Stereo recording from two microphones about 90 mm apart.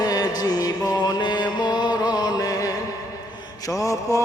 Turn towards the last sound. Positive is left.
turn(degrees=40)  # may be behind; listen again after turning